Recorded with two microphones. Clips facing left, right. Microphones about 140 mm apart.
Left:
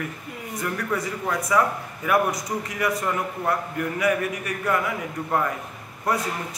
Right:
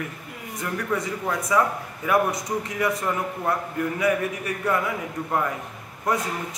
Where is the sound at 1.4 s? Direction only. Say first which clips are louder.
Even; 20° right (ahead or behind).